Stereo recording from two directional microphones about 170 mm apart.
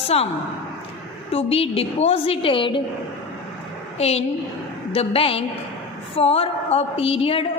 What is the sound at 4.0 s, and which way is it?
A woman's voice, 35° left (ahead or behind).